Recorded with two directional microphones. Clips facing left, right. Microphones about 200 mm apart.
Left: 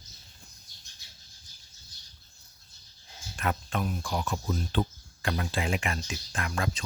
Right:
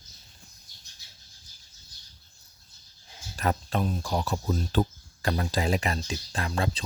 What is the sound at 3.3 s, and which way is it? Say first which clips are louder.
Speech: right 3 dB; 35° right (ahead or behind).